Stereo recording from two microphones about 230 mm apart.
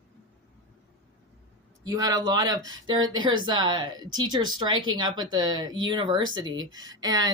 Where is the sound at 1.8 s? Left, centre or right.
Centre.